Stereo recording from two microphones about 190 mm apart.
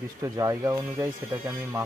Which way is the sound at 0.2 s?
20° right (ahead or behind).